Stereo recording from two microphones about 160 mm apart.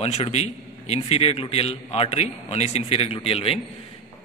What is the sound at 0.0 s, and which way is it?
A man's voice, 40° left (ahead or behind).